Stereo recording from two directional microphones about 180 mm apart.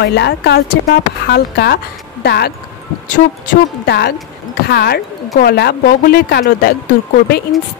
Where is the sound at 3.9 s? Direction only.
60° left (ahead or behind).